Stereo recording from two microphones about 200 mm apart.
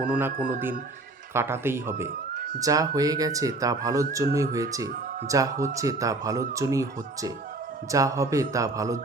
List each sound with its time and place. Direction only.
0.1 s speech: 10° right (ahead or behind)
0.3 s a man's voice: 45° right (ahead or behind)
1.3 s speech: 10° right (ahead or behind)
2.3 s a sound: 45° right (ahead or behind)
2.6 s speech: 15° right (ahead or behind)